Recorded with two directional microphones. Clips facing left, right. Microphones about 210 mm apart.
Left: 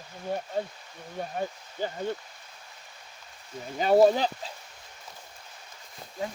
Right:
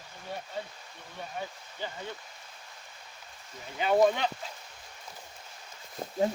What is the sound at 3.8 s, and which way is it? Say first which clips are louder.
Speech: left 4 dB; 40° left (ahead or behind).